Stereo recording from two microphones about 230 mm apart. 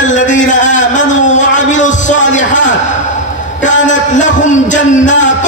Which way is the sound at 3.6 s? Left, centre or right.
Left.